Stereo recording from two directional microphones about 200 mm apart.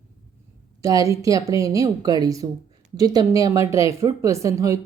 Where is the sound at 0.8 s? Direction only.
15° right (ahead or behind).